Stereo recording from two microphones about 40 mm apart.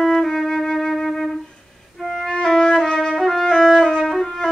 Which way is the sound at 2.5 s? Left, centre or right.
Centre.